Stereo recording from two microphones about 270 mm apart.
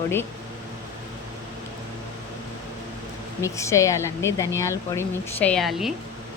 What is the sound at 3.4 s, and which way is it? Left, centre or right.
Speech, centre.